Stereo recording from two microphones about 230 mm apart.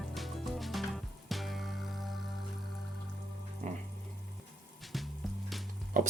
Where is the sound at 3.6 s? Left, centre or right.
Right.